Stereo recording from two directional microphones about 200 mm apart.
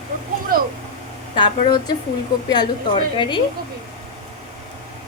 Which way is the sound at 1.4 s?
20° left (ahead or behind).